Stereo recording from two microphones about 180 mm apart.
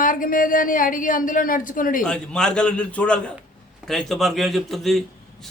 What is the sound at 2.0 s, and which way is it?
A man's voice, 5° left (ahead or behind).